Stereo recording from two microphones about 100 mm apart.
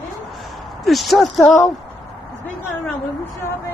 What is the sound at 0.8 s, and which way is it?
Speech, centre (ahead or behind).